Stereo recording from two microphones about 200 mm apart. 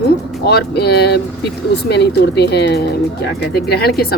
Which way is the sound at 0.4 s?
55° left (ahead or behind).